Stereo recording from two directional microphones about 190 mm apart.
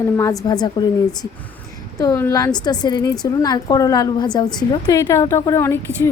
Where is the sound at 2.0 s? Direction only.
15° left (ahead or behind).